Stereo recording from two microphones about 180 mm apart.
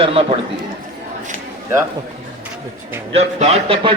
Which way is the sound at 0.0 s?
30° right (ahead or behind).